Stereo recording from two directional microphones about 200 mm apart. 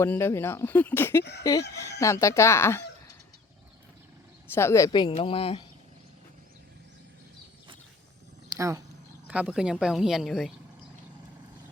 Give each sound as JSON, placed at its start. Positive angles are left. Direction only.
{"t": 0.0, "sound": "speech", "side_deg": 10}
{"t": 4.5, "sound": "speech", "side_deg": 15}
{"t": 8.5, "sound": "speech", "side_deg": -15}